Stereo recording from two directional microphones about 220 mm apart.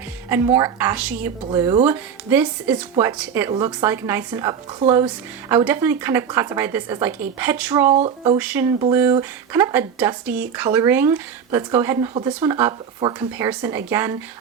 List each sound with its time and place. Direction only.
0.3 s speech: 10° right (ahead or behind)
7.9 s speech: 25° right (ahead or behind)
8.4 s speech: 5° right (ahead or behind)